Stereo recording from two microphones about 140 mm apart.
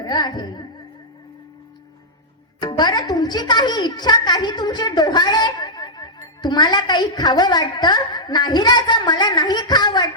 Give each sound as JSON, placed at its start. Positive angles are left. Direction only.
{"t": 0.0, "sound": "a woman's voice", "side_deg": 30}
{"t": 2.6, "sound": "a woman's voice", "side_deg": 30}